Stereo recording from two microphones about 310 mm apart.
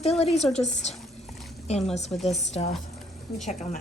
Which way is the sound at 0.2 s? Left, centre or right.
Centre.